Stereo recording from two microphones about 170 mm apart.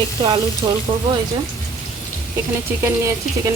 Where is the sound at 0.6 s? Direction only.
25° right (ahead or behind).